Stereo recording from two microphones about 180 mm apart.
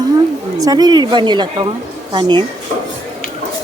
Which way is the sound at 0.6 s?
20° right (ahead or behind).